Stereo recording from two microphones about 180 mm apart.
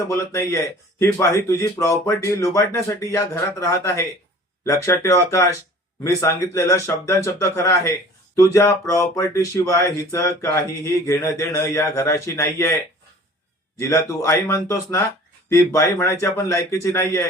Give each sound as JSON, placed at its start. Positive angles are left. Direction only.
{"t": 0.1, "sound": "speech", "side_deg": 15}
{"t": 13.7, "sound": "speech", "side_deg": 15}